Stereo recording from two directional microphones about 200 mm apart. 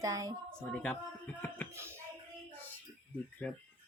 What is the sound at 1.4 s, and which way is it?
Hands, 10° left (ahead or behind).